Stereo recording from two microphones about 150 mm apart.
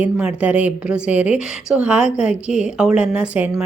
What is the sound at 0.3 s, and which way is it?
A woman's voice, 10° right (ahead or behind).